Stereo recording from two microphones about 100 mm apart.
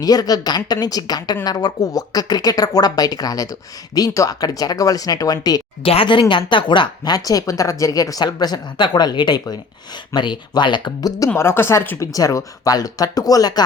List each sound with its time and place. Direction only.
0.0 s speech: 40° left (ahead or behind)
5.8 s a woman's voice: 65° left (ahead or behind); by 11.1 s 50° left (ahead or behind)
11.3 s speech: 25° left (ahead or behind)
12.1 s speech: 35° left (ahead or behind)